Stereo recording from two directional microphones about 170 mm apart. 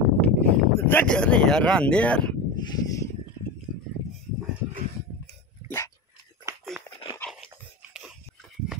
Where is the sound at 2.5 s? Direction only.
25° left (ahead or behind).